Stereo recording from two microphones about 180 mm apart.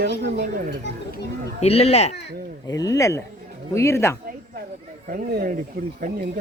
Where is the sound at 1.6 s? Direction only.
35° left (ahead or behind).